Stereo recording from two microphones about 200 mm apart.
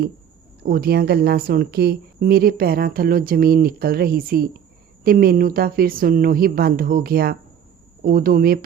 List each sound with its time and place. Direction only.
0.6 s a woman's voice: 50° right (ahead or behind)